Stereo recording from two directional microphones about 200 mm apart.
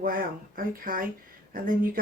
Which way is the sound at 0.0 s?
45° right (ahead or behind).